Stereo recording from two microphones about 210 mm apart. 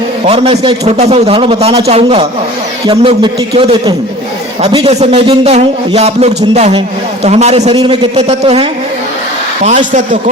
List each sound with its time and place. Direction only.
0.3 s a man's voice: 30° right (ahead or behind)
9.6 s a woman's voice: 35° right (ahead or behind)